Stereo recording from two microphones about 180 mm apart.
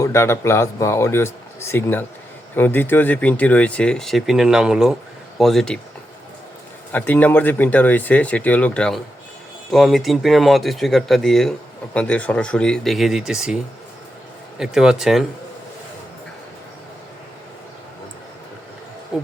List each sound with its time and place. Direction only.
0.0 s speech: 15° left (ahead or behind)
6.9 s speech: 10° left (ahead or behind)
14.6 s speech: 5° right (ahead or behind)
19.1 s hair dryer: 5° right (ahead or behind)